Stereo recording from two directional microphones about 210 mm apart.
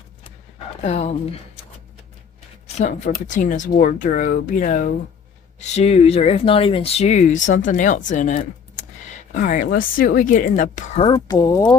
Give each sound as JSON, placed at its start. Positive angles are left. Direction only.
{"t": 0.8, "sound": "speech", "side_deg": 30}
{"t": 2.7, "sound": "speech", "side_deg": 35}
{"t": 11.0, "sound": "speech", "side_deg": 20}